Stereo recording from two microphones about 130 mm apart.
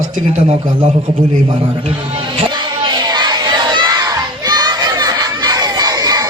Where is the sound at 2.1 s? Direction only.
40° right (ahead or behind).